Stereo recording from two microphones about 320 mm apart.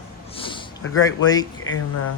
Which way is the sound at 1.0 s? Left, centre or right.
Centre.